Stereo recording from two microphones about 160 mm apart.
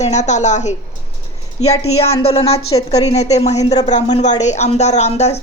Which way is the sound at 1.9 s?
40° left (ahead or behind).